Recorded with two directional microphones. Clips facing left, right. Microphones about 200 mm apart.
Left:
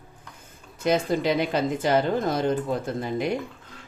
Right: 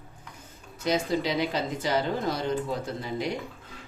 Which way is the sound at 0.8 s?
55° left (ahead or behind).